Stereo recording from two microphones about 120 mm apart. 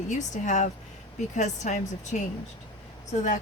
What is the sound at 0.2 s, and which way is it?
A woman's voice, 90° left.